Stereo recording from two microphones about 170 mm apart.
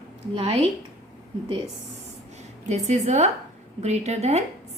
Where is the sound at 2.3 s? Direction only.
45° right (ahead or behind).